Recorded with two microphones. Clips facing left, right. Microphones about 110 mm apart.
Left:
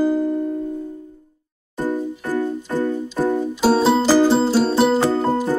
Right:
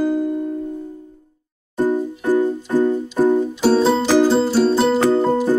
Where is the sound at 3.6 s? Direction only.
5° left (ahead or behind).